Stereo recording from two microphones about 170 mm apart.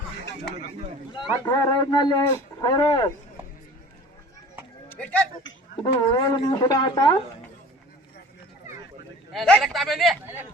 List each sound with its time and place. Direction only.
1.1 s speech: 25° left (ahead or behind)
4.9 s speech: 10° left (ahead or behind)
5.8 s speech: 25° left (ahead or behind)
9.3 s a man's voice: centre (ahead or behind)